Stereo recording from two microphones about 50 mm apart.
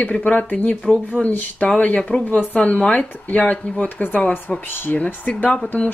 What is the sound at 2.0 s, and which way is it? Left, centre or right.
Speech, centre.